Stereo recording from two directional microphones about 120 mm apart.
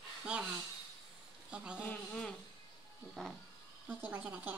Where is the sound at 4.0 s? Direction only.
15° right (ahead or behind).